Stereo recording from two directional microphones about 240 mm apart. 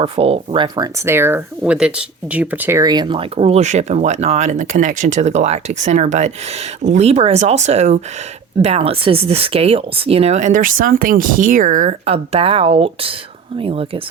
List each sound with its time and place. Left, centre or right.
0.0 s speech: right